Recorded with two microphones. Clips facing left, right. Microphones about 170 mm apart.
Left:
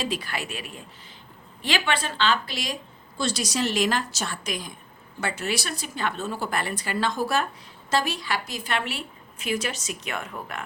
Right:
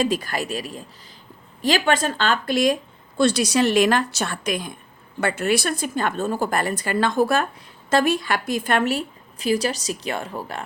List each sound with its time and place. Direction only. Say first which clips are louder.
0.0 s a woman's voice: right 7 dB; 45° right (ahead or behind)
3.2 s a woman's voice: right 8 dB; 60° right (ahead or behind); by 10.6 s 30° right (ahead or behind)